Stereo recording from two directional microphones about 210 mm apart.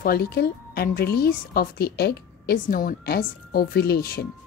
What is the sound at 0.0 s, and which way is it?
A woman's voice, 50° left (ahead or behind).